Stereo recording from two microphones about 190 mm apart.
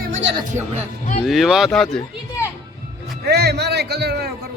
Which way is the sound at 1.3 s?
Centre (ahead or behind).